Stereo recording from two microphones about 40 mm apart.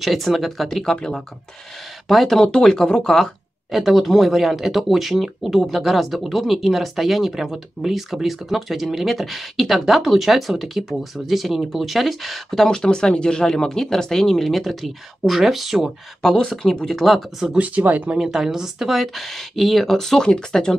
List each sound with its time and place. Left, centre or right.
0.0 s speech: centre
2.0 s speech: centre
2.4 s speech: centre
3.7 s speech: centre
12.4 s speech: centre
16.9 s speech: centre
17.6 s speech: right
18.2 s speech: centre
20.2 s speech: centre